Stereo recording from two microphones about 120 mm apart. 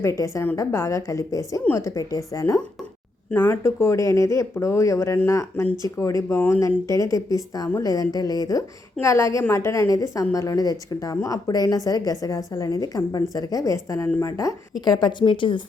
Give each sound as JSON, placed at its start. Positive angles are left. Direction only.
{"t": 0.0, "sound": "a woman's voice", "side_deg": 25}
{"t": 14.8, "sound": "speech", "side_deg": 40}